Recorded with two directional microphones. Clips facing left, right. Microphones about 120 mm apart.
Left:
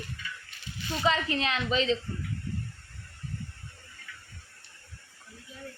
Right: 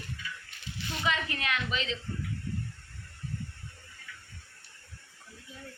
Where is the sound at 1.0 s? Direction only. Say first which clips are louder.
Left 5 dB; 30° left (ahead or behind).